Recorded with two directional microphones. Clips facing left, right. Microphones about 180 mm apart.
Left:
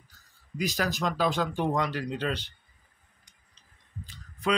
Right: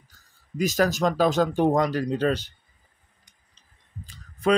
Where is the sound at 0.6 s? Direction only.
45° right (ahead or behind).